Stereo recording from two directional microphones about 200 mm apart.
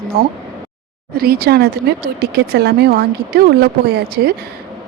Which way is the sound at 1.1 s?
50° right (ahead or behind).